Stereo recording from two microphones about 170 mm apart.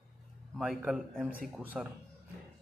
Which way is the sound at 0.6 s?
5° right (ahead or behind).